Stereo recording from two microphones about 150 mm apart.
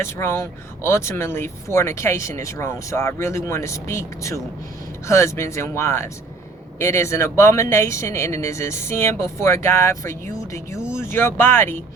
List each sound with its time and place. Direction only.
0.0 s speech: 15° left (ahead or behind)